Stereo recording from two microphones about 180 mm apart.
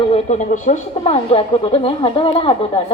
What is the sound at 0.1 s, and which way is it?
A woman's voice, 40° left (ahead or behind).